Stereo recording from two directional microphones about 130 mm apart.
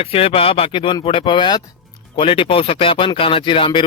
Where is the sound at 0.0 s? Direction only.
45° left (ahead or behind).